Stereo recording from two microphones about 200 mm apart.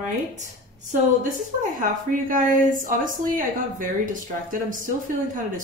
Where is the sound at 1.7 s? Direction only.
40° right (ahead or behind).